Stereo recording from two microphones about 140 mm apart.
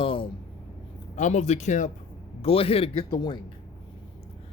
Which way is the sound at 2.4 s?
45° left (ahead or behind).